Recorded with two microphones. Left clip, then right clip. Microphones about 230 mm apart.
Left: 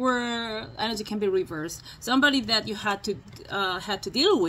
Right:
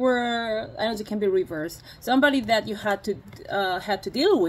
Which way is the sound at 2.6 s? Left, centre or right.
Centre.